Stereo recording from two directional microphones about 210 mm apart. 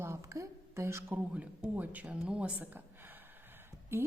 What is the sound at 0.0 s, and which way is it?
A woman's voice, 15° right (ahead or behind).